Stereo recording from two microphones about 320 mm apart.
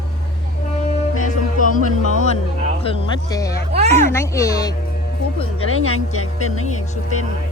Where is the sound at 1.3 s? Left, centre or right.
Left.